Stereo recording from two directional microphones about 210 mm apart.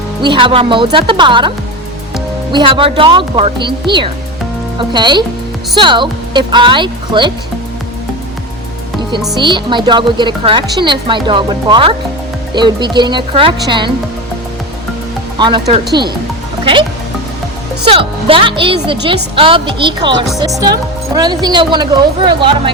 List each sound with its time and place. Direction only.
0.2 s speech: 25° right (ahead or behind)
9.3 s speech: 20° right (ahead or behind)
15.4 s speech: 20° right (ahead or behind)
17.8 s speech: 25° right (ahead or behind)
21.2 s speech: 20° right (ahead or behind)